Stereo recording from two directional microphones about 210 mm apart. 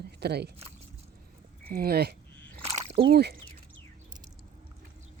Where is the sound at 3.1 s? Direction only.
50° right (ahead or behind).